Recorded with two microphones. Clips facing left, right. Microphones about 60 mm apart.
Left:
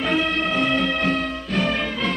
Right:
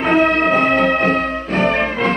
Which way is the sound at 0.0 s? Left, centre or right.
Right.